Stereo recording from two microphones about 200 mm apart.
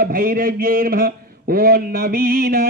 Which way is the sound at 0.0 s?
45° right (ahead or behind).